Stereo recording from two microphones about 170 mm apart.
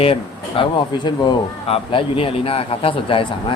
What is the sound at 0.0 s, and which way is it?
Speech, 30° left (ahead or behind).